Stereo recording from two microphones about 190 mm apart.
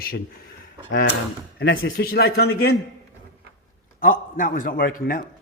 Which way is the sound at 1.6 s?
70° left (ahead or behind).